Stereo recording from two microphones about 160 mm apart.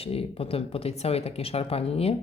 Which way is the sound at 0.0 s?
40° left (ahead or behind).